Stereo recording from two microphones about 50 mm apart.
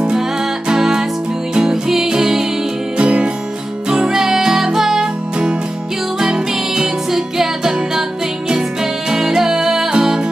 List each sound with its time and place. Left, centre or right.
0.7 s music: centre
3.0 s music: right
9.1 s music: centre